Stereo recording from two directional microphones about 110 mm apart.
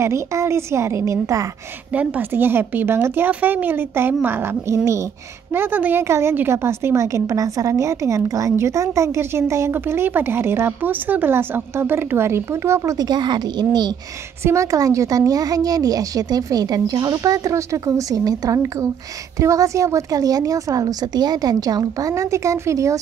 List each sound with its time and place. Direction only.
0.0 s a woman's voice: 25° right (ahead or behind)
13.1 s a woman's voice: 40° right (ahead or behind)
14.4 s a woman's voice: 25° right (ahead or behind)